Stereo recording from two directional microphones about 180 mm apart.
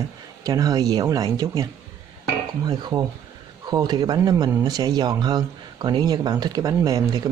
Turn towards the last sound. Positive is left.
turn(degrees=-20)  # may be behind; listen again after turning